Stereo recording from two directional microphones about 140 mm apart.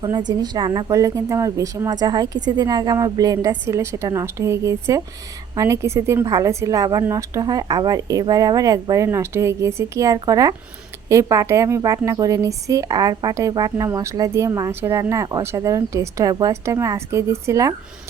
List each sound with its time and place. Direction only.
0.0 s a woman's voice: 30° right (ahead or behind)